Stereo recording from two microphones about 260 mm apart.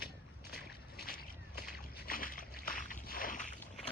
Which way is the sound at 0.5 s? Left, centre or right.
Left.